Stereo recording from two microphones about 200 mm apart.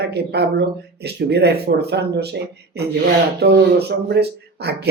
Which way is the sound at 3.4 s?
55° right (ahead or behind).